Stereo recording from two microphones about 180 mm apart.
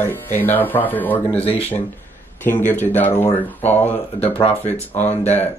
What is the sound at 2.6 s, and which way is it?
Speech, 10° left (ahead or behind).